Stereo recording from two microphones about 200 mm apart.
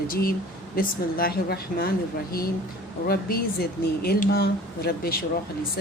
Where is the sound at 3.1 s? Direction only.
50° left (ahead or behind).